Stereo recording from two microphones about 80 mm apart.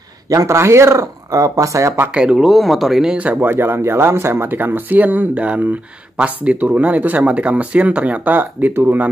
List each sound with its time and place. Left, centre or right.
0.5 s speech: right
2.1 s speech: centre
3.2 s speech: centre
3.4 s speech: right